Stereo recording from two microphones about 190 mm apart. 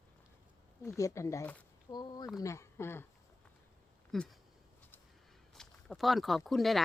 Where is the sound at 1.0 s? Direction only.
15° left (ahead or behind).